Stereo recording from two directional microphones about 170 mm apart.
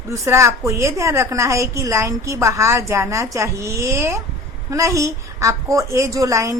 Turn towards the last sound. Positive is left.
turn(degrees=-20)  # may be behind; listen again after turning